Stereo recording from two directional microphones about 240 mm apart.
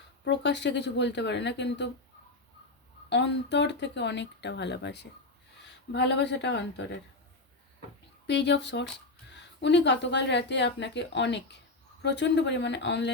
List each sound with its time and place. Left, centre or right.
0.3 s speech: left
3.1 s speech: left
8.3 s speech: left